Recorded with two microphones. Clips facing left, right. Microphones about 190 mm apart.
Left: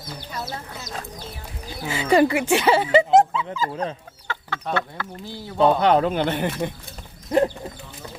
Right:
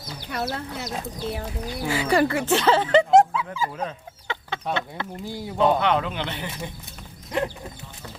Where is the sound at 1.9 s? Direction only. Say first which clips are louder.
Left 3 dB; 20° left (ahead or behind); by 3.4 s centre (ahead or behind).